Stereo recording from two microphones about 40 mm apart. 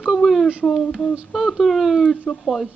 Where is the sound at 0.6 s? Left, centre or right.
Centre.